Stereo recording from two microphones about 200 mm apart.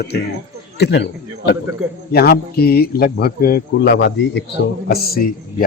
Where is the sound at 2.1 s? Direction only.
50° left (ahead or behind).